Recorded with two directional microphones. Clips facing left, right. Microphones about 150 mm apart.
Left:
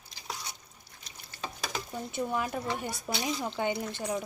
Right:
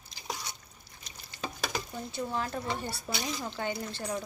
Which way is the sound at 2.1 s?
20° left (ahead or behind).